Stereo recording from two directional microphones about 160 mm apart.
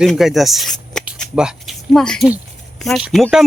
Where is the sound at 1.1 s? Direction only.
5° right (ahead or behind).